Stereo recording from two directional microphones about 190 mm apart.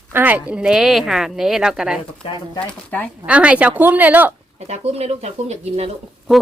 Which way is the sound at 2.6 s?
5° left (ahead or behind).